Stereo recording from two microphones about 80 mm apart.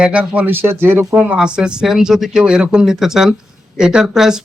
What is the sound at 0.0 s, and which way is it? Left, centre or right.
A man's voice, centre.